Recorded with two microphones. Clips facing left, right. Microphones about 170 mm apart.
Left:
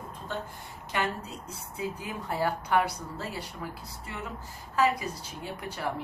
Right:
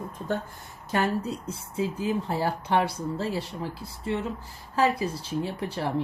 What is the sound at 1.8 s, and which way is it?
Speech, 25° right (ahead or behind).